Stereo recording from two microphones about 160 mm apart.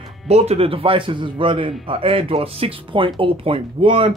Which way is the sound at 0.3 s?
40° right (ahead or behind).